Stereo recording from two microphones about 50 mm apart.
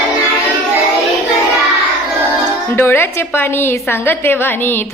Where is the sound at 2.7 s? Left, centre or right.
Left.